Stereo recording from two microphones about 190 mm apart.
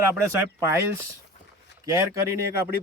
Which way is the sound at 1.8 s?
15° right (ahead or behind).